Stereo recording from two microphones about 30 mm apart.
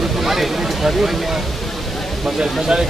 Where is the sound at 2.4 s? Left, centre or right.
Right.